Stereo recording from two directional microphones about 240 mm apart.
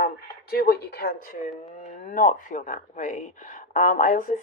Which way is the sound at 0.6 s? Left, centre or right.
Left.